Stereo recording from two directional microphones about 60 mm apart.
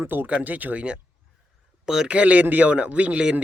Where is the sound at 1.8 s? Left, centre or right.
Centre.